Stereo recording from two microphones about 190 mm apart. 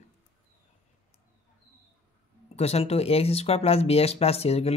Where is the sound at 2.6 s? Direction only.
35° left (ahead or behind).